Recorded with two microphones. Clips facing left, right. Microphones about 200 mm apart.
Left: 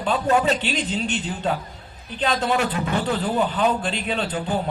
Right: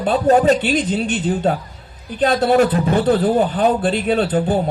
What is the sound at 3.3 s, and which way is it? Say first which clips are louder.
Speech: right 5 dB; 50° right (ahead or behind).